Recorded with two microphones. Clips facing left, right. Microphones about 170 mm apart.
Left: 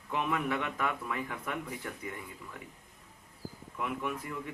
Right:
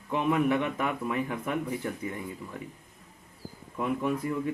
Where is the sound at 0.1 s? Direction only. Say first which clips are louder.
Right 7 dB; 25° right (ahead or behind).